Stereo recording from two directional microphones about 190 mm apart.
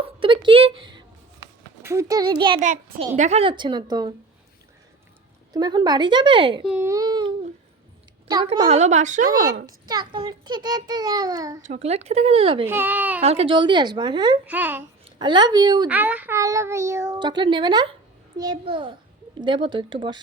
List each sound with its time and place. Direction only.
0.0 s a sound: 25° right (ahead or behind)
1.8 s a child's voice: 15° right (ahead or behind)
3.2 s a child's voice: 35° right (ahead or behind)
5.5 s a child's voice: 20° right (ahead or behind)
6.7 s a child's voice: 10° right (ahead or behind)
8.4 s speech: 35° right (ahead or behind)
9.6 s a child's voice: 20° right (ahead or behind)
11.6 s speech: 35° right (ahead or behind)
12.6 s a child's voice: 10° right (ahead or behind)
13.2 s a child's voice: 30° right (ahead or behind)
14.4 s a child's voice: 10° right (ahead or behind)
15.0 s a woman's voice: 25° right (ahead or behind)
15.9 s a child's voice: 10° right (ahead or behind); by 20.1 s 25° right (ahead or behind)